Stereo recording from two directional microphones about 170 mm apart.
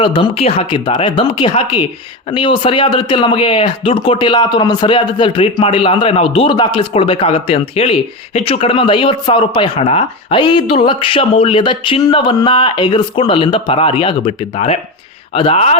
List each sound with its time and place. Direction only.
0.0 s speech: 30° left (ahead or behind)